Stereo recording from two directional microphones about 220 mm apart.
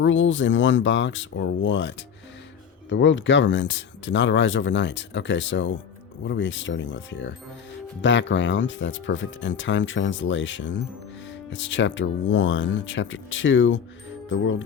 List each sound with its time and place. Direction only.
0.0 s speech: 60° left (ahead or behind)
2.9 s speech: 55° left (ahead or behind)